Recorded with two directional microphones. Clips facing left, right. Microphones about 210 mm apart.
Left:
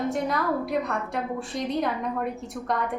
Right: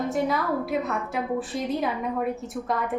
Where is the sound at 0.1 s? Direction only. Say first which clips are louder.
Right 1 dB; centre (ahead or behind).